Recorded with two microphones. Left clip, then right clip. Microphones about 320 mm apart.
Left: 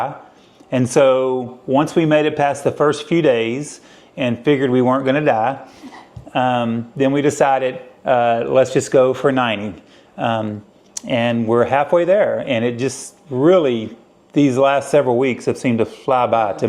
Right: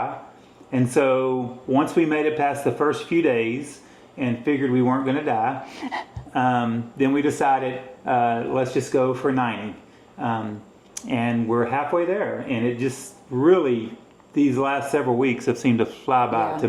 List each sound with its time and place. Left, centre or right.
0.7 s speech: left
4.2 s a man's voice: left